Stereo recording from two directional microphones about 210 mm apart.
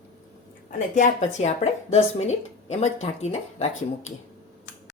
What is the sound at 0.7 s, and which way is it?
A woman's voice, 35° left (ahead or behind).